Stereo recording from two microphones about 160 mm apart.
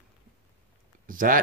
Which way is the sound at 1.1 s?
55° right (ahead or behind).